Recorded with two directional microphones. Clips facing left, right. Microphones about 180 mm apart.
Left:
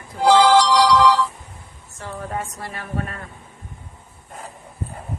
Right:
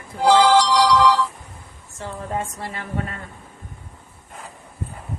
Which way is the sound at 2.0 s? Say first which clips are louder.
Right 1 dB; 25° right (ahead or behind).